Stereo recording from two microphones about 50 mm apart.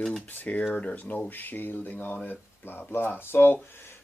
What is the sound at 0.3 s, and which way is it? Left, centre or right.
Speech, left.